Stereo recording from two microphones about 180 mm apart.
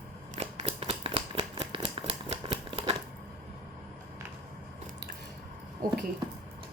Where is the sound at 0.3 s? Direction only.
35° right (ahead or behind).